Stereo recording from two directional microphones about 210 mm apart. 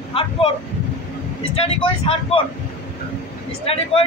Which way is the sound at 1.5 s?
25° left (ahead or behind).